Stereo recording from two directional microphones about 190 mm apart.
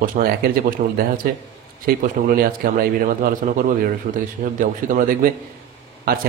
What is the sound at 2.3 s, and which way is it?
Speech, 50° right (ahead or behind).